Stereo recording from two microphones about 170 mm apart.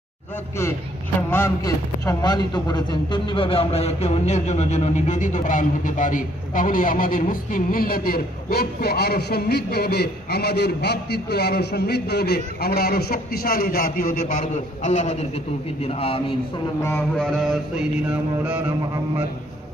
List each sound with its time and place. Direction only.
1.3 s a man's voice: 15° left (ahead or behind); by 16.3 s 35° left (ahead or behind)
17.2 s mantra: centre (ahead or behind)